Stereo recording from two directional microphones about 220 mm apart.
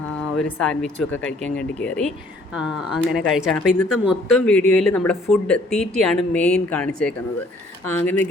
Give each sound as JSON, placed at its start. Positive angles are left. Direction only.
{"t": 0.3, "sound": "speech", "side_deg": 5}